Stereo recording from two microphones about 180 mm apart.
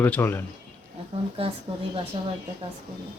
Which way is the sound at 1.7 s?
30° right (ahead or behind).